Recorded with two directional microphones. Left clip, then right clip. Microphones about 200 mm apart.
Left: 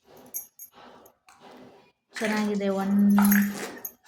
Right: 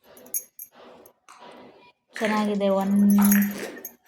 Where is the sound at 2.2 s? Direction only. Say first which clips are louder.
Right 4 dB; centre (ahead or behind).